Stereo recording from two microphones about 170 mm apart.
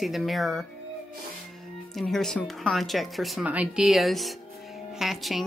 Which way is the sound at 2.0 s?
Centre (ahead or behind).